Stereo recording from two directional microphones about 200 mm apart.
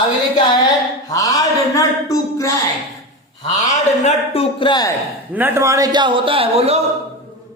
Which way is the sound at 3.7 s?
30° left (ahead or behind).